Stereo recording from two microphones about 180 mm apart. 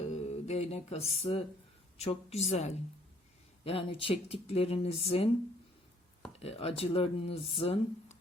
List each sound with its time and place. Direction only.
0.1 s a sound: 35° left (ahead or behind)
2.0 s speech: 35° left (ahead or behind)
6.4 s speech: 35° left (ahead or behind)